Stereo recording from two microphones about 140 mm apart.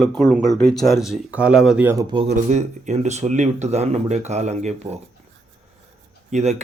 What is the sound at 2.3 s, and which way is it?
Speech, 55° right (ahead or behind).